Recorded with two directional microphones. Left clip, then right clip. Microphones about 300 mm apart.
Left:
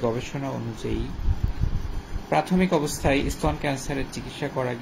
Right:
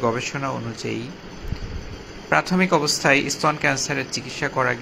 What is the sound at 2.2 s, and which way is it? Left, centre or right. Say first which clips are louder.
Speech: right 4 dB; centre.